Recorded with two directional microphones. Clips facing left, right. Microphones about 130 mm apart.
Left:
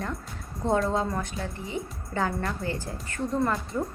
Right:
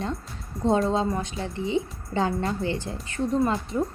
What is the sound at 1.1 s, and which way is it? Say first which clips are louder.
A woman's voice: right 2 dB; 20° right (ahead or behind).